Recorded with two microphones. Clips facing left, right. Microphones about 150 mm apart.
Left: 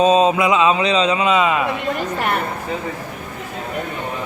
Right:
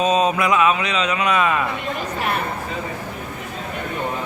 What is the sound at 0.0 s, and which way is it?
A man's voice, 30° left (ahead or behind).